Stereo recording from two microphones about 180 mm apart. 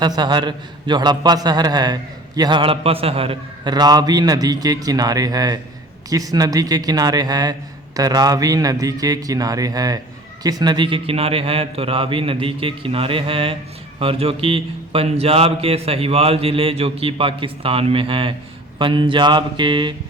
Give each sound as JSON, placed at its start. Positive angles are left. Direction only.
{"t": 0.2, "sound": "a man's voice", "side_deg": -25}